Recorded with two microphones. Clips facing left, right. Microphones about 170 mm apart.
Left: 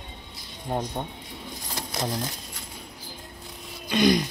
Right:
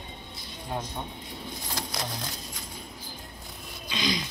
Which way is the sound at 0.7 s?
45° left (ahead or behind).